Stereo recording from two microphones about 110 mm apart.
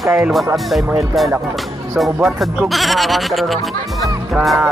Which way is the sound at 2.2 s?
Centre (ahead or behind).